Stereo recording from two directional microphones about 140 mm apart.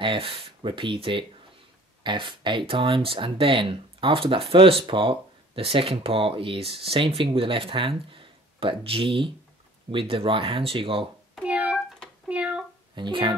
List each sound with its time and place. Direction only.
0.0 s speech: 40° right (ahead or behind)
11.4 s a sound: 10° right (ahead or behind)
12.9 s a child's voice: 35° right (ahead or behind)